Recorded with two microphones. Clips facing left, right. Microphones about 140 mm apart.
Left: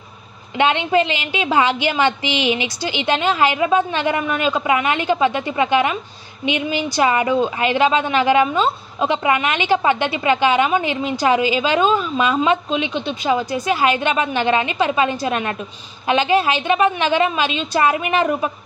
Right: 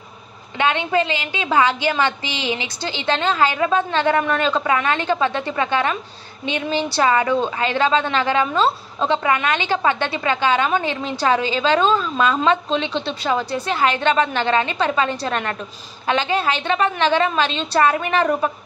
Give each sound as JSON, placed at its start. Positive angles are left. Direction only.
{"t": 0.6, "sound": "a woman's voice", "side_deg": 20}